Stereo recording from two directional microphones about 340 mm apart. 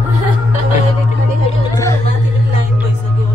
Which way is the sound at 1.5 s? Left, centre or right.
Centre.